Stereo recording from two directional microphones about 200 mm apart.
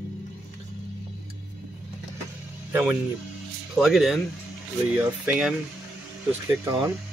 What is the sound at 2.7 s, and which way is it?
Speech, 10° right (ahead or behind).